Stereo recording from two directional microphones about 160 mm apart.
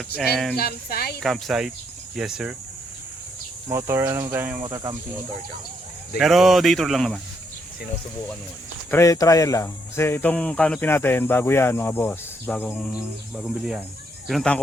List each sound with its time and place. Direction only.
0.5 s speech: 75° left (ahead or behind)
1.2 s speech: centre (ahead or behind)
3.7 s speech: 15° right (ahead or behind)
4.6 s speech: 25° right (ahead or behind)
6.1 s speech: centre (ahead or behind)
8.9 s speech: 20° left (ahead or behind)
12.9 s speech: 5° right (ahead or behind)